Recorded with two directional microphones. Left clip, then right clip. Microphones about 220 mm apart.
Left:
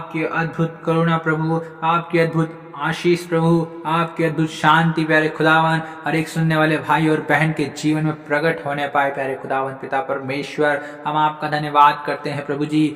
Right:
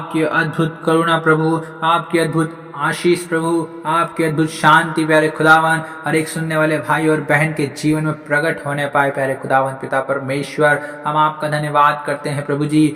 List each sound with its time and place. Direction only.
0.1 s speech: 20° right (ahead or behind)